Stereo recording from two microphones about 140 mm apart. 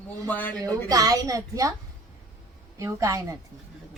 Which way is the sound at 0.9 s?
25° right (ahead or behind).